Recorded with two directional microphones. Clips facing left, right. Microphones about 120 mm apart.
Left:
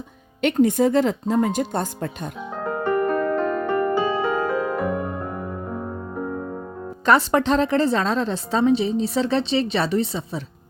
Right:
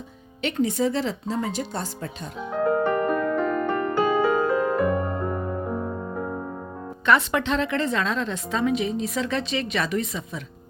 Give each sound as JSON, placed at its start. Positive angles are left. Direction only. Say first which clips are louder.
{"t": 0.4, "sound": "speech", "louder": "left 6 dB", "side_deg": 50}
{"t": 2.6, "sound": "music", "louder": "right 1 dB", "side_deg": 0}
{"t": 7.0, "sound": "a woman's voice", "louder": "left 4 dB", "side_deg": 35}